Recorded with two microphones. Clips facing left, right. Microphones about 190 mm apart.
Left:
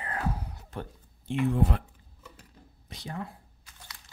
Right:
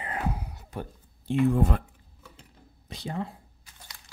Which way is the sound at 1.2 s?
45° right (ahead or behind).